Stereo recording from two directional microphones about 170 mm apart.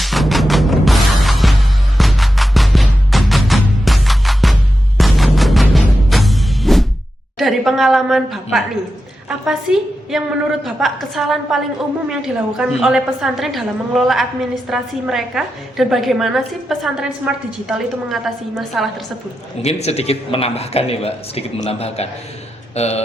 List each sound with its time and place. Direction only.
0.0 s music: centre (ahead or behind)
7.3 s a woman's voice: centre (ahead or behind)
9.7 s a woman's voice: 5° right (ahead or behind)
19.6 s a man's voice: 40° left (ahead or behind)